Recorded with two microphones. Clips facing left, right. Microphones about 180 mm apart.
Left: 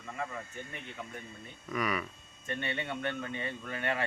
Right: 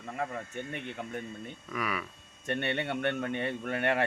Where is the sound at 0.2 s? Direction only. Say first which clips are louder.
Right 4 dB; 65° right (ahead or behind).